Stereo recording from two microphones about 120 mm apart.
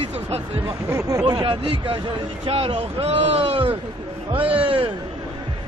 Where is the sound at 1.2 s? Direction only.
40° right (ahead or behind).